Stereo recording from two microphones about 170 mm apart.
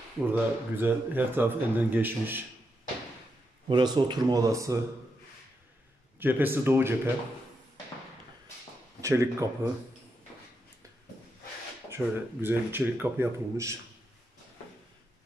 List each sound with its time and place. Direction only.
0.3 s a man's voice: 10° right (ahead or behind)
3.6 s speech: 25° right (ahead or behind)
6.1 s a man's voice: 10° right (ahead or behind)
9.0 s a man's voice: 15° right (ahead or behind)
11.9 s a man's voice: 15° right (ahead or behind)